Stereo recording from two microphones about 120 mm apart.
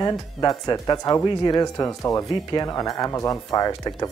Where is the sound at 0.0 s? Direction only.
35° left (ahead or behind).